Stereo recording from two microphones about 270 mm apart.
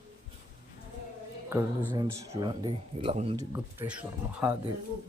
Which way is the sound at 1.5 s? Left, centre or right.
Centre.